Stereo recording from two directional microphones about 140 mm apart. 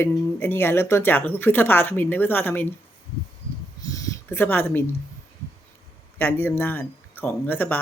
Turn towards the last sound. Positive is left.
turn(degrees=15)  # may be behind; listen again after turning